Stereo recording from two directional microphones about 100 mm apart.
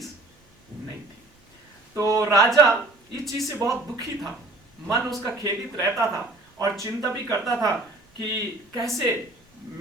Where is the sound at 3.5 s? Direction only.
30° right (ahead or behind).